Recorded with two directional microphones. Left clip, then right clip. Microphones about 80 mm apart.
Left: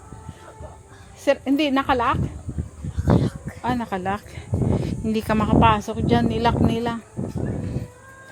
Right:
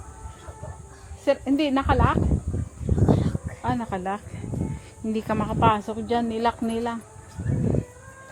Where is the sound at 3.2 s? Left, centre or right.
Left.